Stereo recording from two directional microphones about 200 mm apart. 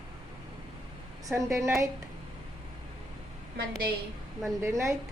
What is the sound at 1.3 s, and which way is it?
Speech, 15° right (ahead or behind).